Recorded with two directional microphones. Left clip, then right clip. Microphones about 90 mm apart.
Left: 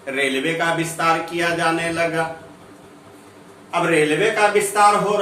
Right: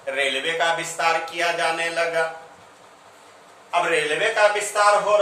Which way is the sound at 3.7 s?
35° right (ahead or behind).